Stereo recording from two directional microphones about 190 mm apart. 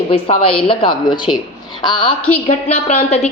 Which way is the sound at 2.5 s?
35° left (ahead or behind).